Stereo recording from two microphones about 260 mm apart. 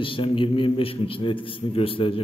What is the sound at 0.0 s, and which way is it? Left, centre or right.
A man's voice, centre.